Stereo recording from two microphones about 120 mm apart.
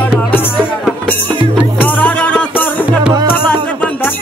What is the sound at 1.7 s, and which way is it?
Music, 15° left (ahead or behind).